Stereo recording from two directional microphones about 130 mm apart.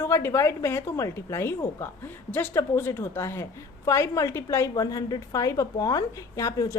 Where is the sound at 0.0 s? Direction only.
20° left (ahead or behind).